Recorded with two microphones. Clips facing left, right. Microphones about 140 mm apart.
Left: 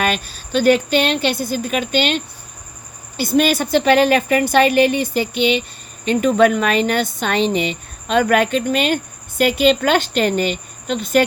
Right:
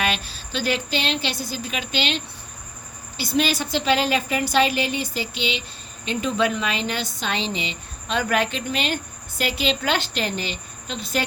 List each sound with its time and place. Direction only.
0.0 s a woman's voice: 50° left (ahead or behind)